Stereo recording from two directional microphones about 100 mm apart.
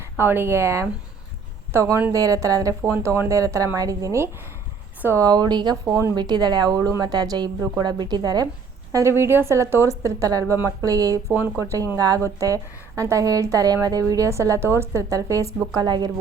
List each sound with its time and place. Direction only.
0.2 s a woman's voice: 25° right (ahead or behind)
2.8 s a woman's voice: 25° right (ahead or behind)
5.2 s a woman's voice: 45° right (ahead or behind)
6.1 s a woman's voice: 45° right (ahead or behind)
8.9 s a woman's voice: 30° right (ahead or behind)
11.3 s a woman's voice: 25° right (ahead or behind)
15.7 s speech: 45° right (ahead or behind)